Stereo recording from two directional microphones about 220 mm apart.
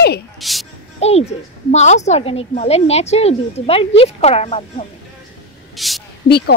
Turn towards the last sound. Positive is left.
turn(degrees=45)  # may be behind; listen again after turning